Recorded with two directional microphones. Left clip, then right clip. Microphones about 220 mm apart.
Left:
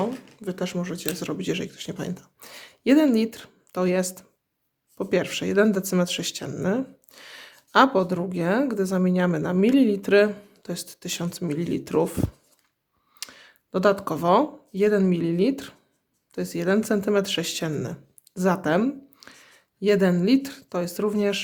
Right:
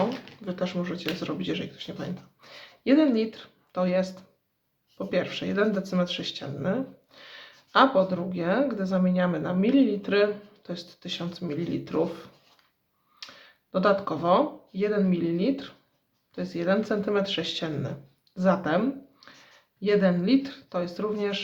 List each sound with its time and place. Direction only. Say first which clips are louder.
0.4 s speech: left 1 dB; 45° left (ahead or behind)